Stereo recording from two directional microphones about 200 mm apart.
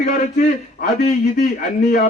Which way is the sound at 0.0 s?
45° left (ahead or behind).